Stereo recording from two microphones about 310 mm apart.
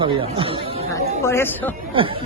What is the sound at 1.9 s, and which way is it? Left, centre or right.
Speech, centre.